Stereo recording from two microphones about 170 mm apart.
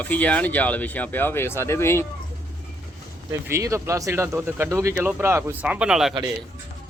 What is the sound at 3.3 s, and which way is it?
Speech, 15° right (ahead or behind).